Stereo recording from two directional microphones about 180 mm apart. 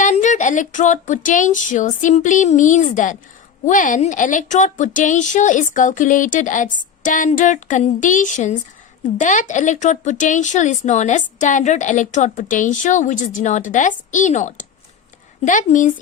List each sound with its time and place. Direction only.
0.0 s speech: 40° left (ahead or behind)